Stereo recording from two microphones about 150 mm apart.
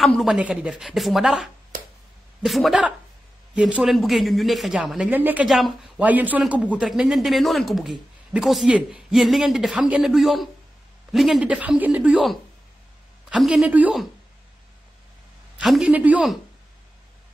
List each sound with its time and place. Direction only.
0.0 s a man's voice: centre (ahead or behind)
15.6 s a man's voice: 5° right (ahead or behind)